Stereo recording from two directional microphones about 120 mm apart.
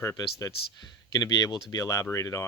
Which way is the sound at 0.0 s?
25° left (ahead or behind).